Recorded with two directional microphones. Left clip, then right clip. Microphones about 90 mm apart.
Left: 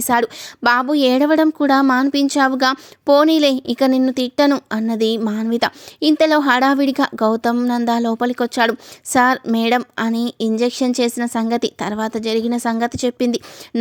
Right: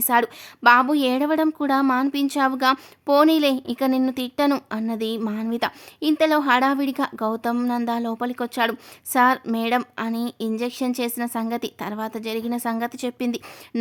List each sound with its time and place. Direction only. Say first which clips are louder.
0.0 s a woman's voice: left 3 dB; 50° left (ahead or behind)